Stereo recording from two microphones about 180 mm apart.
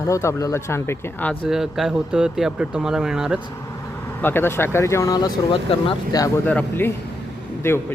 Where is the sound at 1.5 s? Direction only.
Centre (ahead or behind).